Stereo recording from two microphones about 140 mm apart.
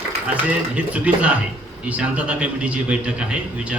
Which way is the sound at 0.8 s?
10° right (ahead or behind).